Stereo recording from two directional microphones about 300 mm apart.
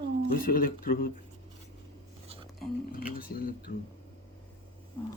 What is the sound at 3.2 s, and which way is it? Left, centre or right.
Speech, left.